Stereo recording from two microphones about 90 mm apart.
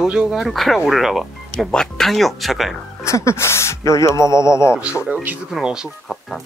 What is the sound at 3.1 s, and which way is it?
Speech, 35° left (ahead or behind).